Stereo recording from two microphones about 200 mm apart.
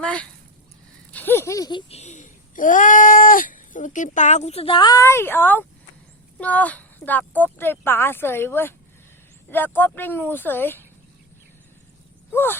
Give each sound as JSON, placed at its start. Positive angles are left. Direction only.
{"t": 0.0, "sound": "speech", "side_deg": 5}
{"t": 1.9, "sound": "speech", "side_deg": 35}
{"t": 12.3, "sound": "a sound", "side_deg": 10}